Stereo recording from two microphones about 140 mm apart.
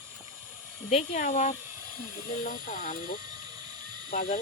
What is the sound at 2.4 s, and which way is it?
Speech, 75° left (ahead or behind).